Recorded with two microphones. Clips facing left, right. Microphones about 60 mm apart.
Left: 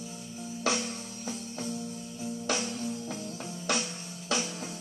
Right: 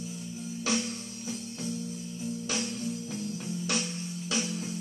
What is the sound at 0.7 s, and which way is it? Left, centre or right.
Music, left.